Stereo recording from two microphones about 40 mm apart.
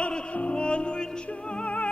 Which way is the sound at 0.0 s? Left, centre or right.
Left.